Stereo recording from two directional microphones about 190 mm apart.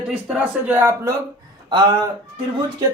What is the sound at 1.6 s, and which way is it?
Speech, 25° right (ahead or behind).